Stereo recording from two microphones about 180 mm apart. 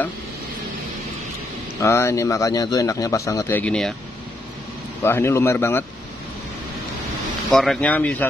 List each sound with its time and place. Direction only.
1.8 s a man's voice: 15° left (ahead or behind)
5.0 s a man's voice: 15° left (ahead or behind)
7.5 s a man's voice: centre (ahead or behind)